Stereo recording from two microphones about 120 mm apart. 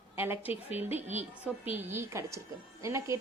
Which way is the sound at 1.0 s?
75° right (ahead or behind).